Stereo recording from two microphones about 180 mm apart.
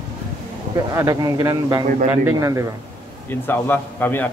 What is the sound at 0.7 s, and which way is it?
A man's voice, 20° right (ahead or behind).